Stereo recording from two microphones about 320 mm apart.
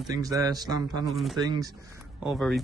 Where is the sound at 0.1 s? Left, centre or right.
Centre.